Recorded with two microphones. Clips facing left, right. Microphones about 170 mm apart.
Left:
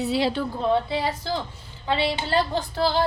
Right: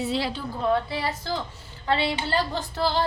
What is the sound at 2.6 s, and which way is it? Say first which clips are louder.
Speech: left 2 dB; 10° left (ahead or behind).